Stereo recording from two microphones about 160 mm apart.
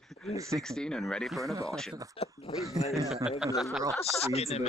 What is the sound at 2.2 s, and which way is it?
Speech, 40° left (ahead or behind).